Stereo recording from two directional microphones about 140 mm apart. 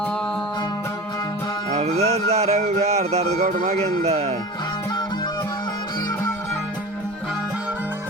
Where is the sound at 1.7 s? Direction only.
50° right (ahead or behind).